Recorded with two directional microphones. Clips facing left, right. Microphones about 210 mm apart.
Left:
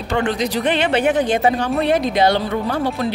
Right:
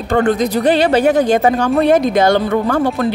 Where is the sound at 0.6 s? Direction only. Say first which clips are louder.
Right 5 dB; 35° right (ahead or behind).